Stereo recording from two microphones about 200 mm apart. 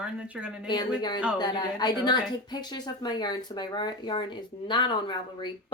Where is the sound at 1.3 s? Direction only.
20° left (ahead or behind).